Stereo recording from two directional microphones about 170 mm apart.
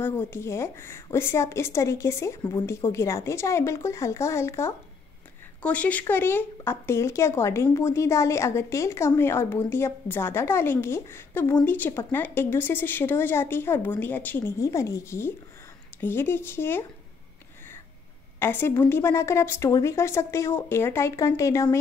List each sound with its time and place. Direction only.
0.0 s speech: 15° left (ahead or behind)
18.4 s speech: 15° left (ahead or behind)